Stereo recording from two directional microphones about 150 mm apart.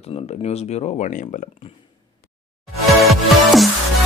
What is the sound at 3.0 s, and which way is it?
Music, centre (ahead or behind).